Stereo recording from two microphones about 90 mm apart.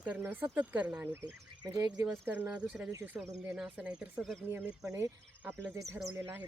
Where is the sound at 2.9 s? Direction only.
25° right (ahead or behind).